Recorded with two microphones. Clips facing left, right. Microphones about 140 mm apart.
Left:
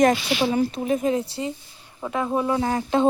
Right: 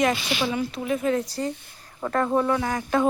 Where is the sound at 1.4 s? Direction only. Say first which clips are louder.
Right 1 dB; 10° left (ahead or behind).